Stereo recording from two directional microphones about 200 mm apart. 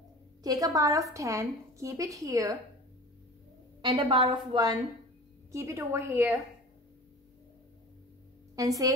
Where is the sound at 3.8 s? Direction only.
25° right (ahead or behind).